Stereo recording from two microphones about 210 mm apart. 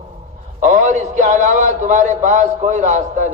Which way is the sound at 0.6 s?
35° right (ahead or behind).